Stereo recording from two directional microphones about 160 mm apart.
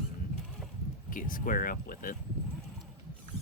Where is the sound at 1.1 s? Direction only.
60° left (ahead or behind).